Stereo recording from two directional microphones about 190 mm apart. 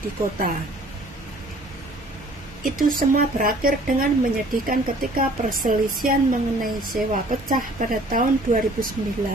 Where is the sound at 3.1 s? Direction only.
50° right (ahead or behind).